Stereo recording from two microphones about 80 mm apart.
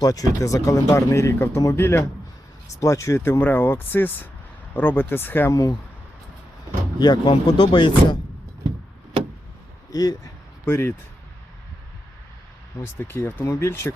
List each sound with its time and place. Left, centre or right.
0.0 s speech: left
3.4 s speech: left
5.5 s speech: left
7.0 s speech: left
9.9 s speech: left
10.7 s speech: left
12.8 s speech: left